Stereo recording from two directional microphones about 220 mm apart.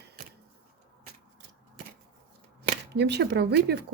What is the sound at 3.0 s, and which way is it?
Speech, 50° right (ahead or behind).